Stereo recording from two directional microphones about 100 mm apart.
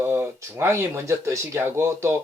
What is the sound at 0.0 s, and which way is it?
Speech, 25° right (ahead or behind).